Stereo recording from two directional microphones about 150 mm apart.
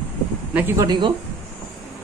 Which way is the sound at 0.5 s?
15° right (ahead or behind).